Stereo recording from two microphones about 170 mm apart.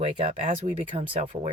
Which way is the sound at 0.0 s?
35° right (ahead or behind).